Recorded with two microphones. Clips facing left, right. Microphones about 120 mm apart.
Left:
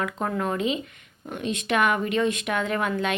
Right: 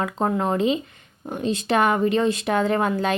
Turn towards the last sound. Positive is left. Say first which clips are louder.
# right 4 dB
turn(degrees=-30)  # may be behind; listen again after turning